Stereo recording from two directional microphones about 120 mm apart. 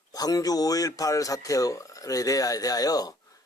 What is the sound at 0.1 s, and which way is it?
Speech, 30° left (ahead or behind).